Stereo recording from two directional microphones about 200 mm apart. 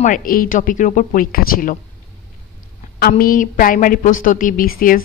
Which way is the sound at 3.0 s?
45° left (ahead or behind).